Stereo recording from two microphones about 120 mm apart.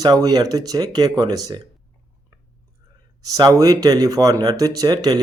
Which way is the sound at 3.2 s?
30° right (ahead or behind).